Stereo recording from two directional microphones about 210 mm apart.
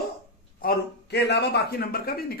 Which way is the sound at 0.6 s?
50° left (ahead or behind).